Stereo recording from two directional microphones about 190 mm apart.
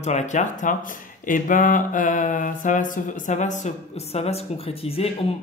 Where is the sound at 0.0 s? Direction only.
35° left (ahead or behind).